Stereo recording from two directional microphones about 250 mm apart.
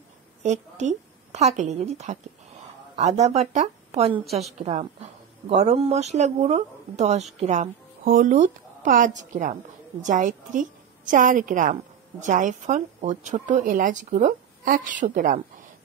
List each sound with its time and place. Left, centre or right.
0.4 s a woman's voice: right